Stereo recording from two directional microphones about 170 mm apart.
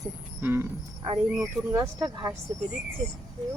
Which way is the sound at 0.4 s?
10° right (ahead or behind).